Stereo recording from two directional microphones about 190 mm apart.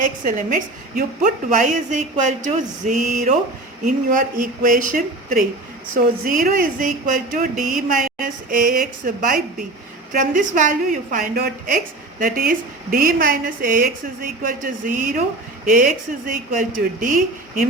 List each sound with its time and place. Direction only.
0.0 s a woman's voice: 45° right (ahead or behind)